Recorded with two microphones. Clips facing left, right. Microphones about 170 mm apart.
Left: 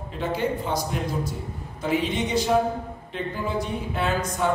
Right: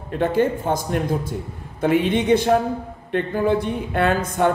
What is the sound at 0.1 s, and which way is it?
Speech, 55° right (ahead or behind).